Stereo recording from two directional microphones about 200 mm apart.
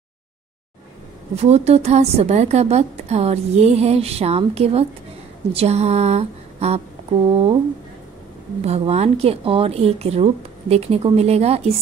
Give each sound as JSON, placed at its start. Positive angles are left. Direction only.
{"t": 1.3, "sound": "a woman's voice", "side_deg": -30}
{"t": 8.6, "sound": "a woman's voice", "side_deg": -30}